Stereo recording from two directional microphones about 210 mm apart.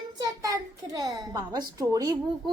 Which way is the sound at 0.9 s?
20° right (ahead or behind).